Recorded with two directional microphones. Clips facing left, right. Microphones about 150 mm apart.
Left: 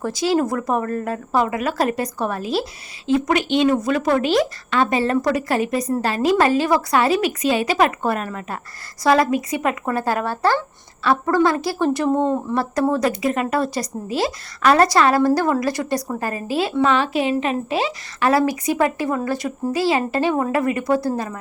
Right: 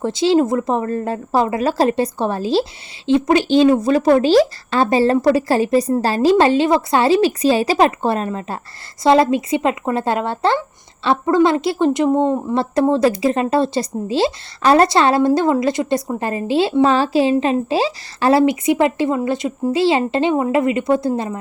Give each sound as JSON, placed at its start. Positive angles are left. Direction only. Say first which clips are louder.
{"t": 0.0, "sound": "a woman's voice", "louder": "right 4 dB", "side_deg": -25}